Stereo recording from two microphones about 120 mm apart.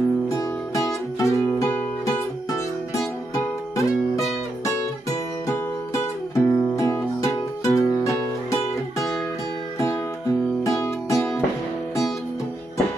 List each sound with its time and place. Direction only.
0.3 s music: 25° left (ahead or behind)
6.3 s music: 25° left (ahead or behind)
10.6 s music: 25° left (ahead or behind)